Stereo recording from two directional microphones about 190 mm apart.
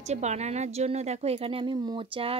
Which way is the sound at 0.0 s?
35° right (ahead or behind).